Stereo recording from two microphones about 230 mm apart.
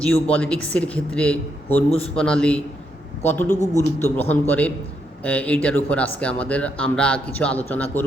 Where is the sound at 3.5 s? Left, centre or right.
Left.